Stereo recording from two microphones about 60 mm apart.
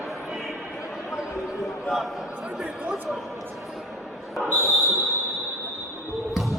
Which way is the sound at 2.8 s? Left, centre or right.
Right.